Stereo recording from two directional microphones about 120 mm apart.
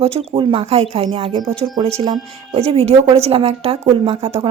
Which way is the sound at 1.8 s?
60° right (ahead or behind).